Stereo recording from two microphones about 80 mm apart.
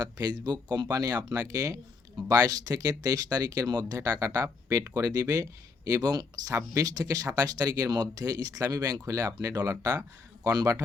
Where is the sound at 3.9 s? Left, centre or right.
Right.